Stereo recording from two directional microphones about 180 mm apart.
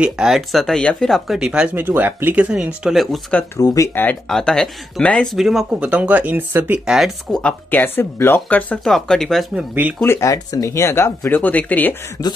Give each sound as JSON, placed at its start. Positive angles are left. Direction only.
{"t": 0.0, "sound": "speech", "side_deg": -5}
{"t": 3.6, "sound": "speech", "side_deg": 20}
{"t": 10.0, "sound": "speech", "side_deg": 15}